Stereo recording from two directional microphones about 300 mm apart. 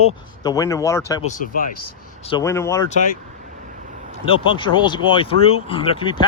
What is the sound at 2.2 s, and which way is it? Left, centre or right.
Speech, centre.